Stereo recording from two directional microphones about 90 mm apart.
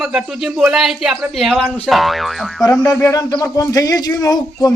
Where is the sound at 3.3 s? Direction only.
45° left (ahead or behind).